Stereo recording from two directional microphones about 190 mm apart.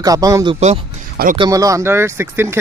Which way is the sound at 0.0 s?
20° right (ahead or behind).